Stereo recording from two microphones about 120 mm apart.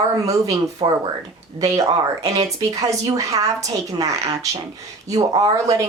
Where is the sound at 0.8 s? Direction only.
45° right (ahead or behind).